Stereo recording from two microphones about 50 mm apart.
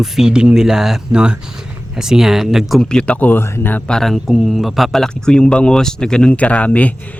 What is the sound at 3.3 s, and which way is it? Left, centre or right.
Speech, left.